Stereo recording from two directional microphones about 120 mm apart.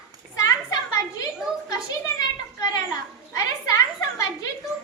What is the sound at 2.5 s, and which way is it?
Children playing, 30° left (ahead or behind).